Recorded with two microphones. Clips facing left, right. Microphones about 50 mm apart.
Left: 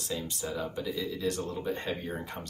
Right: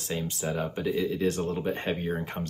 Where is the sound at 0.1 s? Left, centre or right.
Right.